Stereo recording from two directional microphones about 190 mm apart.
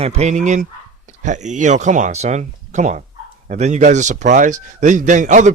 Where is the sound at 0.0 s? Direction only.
35° right (ahead or behind).